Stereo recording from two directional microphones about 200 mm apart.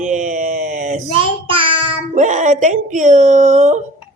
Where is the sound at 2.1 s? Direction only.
35° right (ahead or behind).